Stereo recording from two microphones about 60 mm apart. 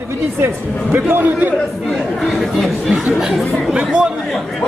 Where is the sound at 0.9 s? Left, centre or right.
Right.